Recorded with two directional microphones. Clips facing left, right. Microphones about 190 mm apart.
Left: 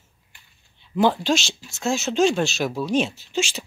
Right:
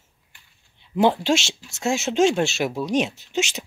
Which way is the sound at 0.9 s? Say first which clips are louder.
Right 1 dB; 25° right (ahead or behind).